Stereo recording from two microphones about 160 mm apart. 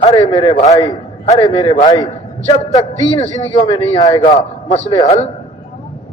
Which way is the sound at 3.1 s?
45° left (ahead or behind).